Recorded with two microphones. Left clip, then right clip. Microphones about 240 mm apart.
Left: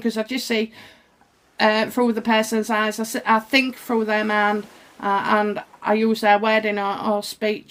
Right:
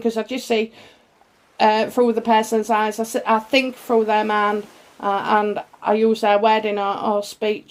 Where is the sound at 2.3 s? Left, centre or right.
Left.